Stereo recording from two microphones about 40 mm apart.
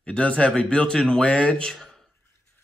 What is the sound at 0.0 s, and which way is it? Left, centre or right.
Speech, left.